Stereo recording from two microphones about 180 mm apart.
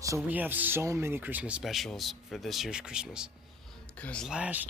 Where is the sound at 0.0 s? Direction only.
15° right (ahead or behind).